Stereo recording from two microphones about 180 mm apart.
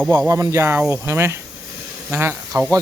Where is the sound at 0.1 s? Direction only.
15° right (ahead or behind).